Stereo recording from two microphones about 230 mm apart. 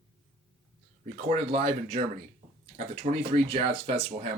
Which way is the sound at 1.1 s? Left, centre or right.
Right.